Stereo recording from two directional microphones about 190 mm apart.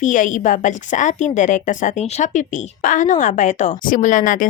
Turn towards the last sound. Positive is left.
turn(degrees=45)  # may be behind; listen again after turning